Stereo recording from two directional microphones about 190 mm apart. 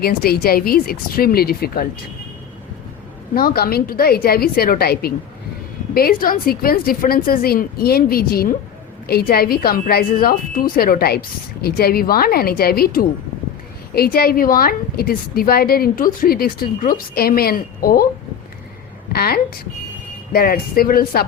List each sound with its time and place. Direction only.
0.0 s a woman's voice: 55° left (ahead or behind)
3.3 s a woman's voice: 55° left (ahead or behind)
19.1 s a woman's voice: 50° left (ahead or behind)